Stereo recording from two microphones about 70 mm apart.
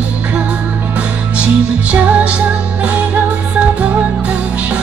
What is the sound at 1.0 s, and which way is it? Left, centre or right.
Music, centre.